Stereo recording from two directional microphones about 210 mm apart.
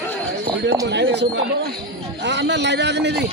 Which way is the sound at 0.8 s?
55° right (ahead or behind).